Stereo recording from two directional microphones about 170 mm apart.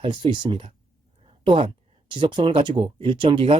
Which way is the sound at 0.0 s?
30° right (ahead or behind).